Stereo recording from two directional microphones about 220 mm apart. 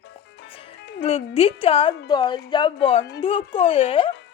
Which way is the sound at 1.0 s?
25° left (ahead or behind).